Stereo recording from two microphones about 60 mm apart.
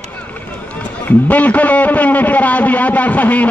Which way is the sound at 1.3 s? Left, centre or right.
Left.